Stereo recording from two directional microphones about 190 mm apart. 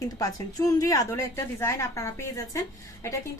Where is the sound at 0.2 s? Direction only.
20° left (ahead or behind).